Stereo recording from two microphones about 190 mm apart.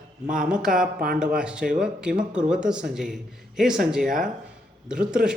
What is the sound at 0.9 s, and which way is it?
Speech, 50° right (ahead or behind).